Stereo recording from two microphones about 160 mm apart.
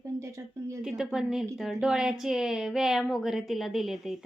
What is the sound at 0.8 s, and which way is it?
A woman's voice, 5° right (ahead or behind).